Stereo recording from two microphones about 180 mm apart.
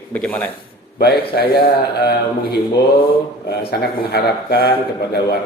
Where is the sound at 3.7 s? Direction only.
65° left (ahead or behind).